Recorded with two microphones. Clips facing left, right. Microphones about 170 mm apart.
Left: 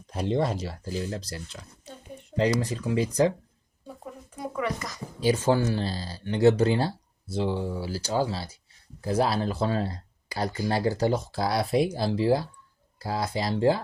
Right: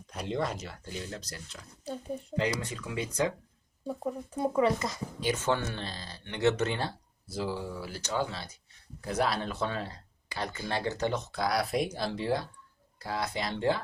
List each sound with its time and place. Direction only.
0.1 s speech: 30° left (ahead or behind)
1.8 s oink: 35° right (ahead or behind)
2.3 s speech: 35° left (ahead or behind)
4.0 s a sound: 30° right (ahead or behind)
5.2 s speech: 35° left (ahead or behind)